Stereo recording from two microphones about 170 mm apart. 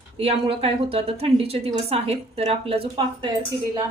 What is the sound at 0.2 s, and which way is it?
A woman's voice, 35° right (ahead or behind).